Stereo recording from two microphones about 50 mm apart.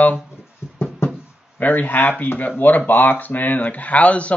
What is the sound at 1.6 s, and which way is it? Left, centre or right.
Speech, left.